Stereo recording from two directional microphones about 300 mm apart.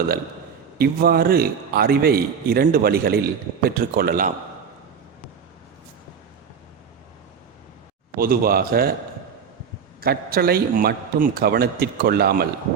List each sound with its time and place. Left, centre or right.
0.8 s a man's voice: right
8.1 s speech: right
10.0 s a man's voice: right